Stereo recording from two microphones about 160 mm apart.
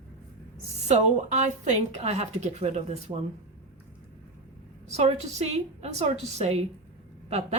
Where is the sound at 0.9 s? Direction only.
45° right (ahead or behind).